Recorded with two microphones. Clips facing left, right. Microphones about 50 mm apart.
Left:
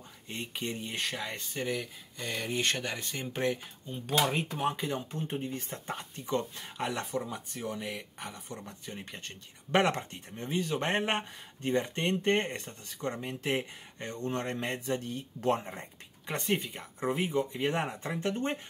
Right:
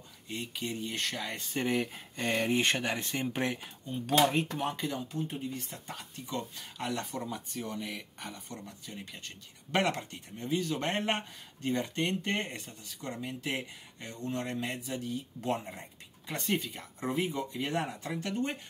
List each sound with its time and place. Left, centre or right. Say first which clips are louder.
0.3 s speech: even; left
0.7 s speech: even; centre
1.7 s speech: right 3 dB; right
2.4 s speech: right 1 dB; centre
3.8 s speech: right 3 dB; centre
4.4 s speech: even; centre
4.9 s speech: left 1 dB; left
7.2 s speech: left 2 dB; centre
8.6 s speech: left 2 dB; left
16.3 s speech: left 1 dB; left